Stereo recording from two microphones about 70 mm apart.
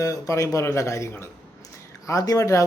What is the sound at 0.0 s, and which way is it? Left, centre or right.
A man's voice, left.